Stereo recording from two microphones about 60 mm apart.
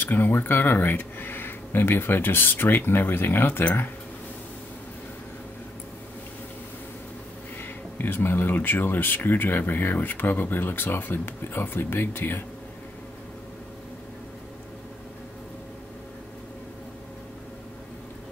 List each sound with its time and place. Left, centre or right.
0.0 s speech: left
7.6 s speech: left